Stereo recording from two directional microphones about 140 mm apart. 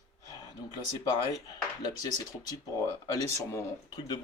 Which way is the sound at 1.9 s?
25° left (ahead or behind).